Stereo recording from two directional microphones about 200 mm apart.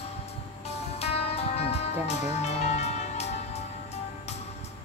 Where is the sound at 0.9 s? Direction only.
30° left (ahead or behind).